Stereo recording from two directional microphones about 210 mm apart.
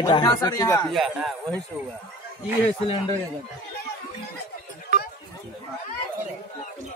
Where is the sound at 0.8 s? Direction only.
Centre (ahead or behind).